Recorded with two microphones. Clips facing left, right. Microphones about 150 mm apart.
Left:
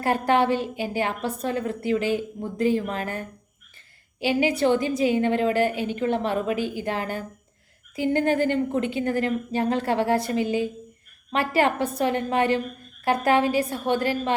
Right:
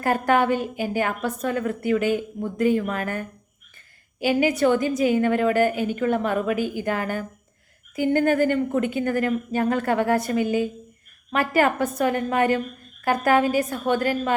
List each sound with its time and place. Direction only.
0.0 s a woman's voice: 30° left (ahead or behind)